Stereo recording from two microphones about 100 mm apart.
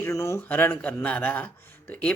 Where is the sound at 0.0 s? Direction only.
30° left (ahead or behind).